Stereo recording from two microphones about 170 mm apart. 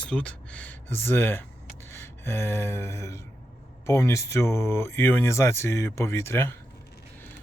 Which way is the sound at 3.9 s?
15° left (ahead or behind).